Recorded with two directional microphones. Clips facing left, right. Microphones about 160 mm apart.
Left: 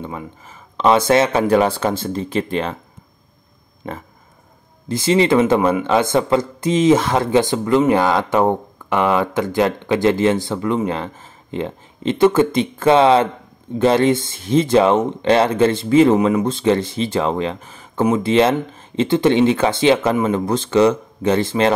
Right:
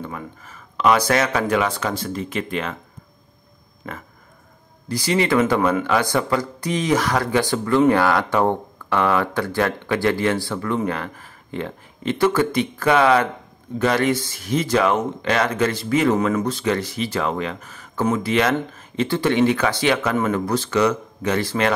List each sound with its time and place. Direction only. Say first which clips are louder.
0.7 s speech: left 4 dB; 25° left (ahead or behind)
4.8 s speech: left 5 dB; 25° left (ahead or behind)